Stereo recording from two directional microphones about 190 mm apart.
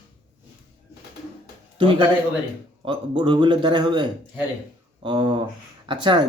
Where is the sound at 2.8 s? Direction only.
25° right (ahead or behind).